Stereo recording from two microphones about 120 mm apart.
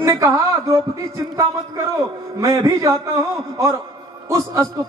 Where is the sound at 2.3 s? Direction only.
25° right (ahead or behind).